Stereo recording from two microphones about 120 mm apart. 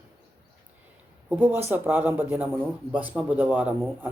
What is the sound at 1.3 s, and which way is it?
A man's voice, 15° right (ahead or behind).